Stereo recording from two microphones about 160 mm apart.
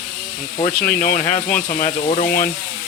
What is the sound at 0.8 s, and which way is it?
Speech, 60° left (ahead or behind).